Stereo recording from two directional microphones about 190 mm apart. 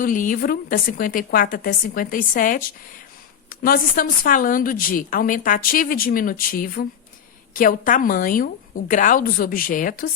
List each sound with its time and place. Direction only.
0.0 s a woman's voice: 45° left (ahead or behind)